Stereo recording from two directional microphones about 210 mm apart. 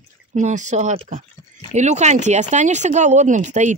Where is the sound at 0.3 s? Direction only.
35° right (ahead or behind).